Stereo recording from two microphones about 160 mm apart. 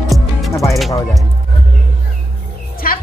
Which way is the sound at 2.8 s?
65° left (ahead or behind).